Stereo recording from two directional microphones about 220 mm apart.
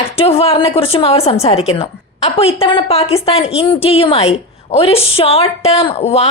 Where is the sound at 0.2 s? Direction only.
25° left (ahead or behind).